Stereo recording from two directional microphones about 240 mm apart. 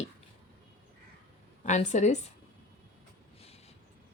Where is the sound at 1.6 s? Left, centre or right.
Left.